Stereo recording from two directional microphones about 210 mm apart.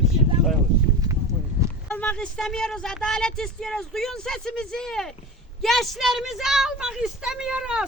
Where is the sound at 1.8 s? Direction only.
5° left (ahead or behind).